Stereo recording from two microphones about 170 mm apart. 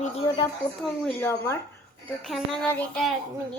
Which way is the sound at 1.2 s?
15° left (ahead or behind).